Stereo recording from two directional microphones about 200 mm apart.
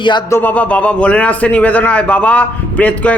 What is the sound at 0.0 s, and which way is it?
Speech, 20° left (ahead or behind).